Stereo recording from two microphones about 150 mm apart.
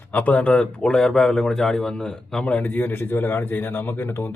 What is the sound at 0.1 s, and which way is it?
A man's voice, 10° left (ahead or behind).